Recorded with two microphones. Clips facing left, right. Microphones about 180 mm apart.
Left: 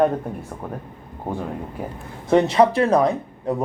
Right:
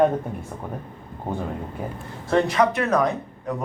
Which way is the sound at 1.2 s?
5° left (ahead or behind).